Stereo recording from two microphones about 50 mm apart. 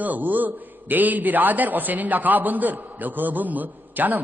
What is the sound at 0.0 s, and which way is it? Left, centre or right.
A man's voice, right.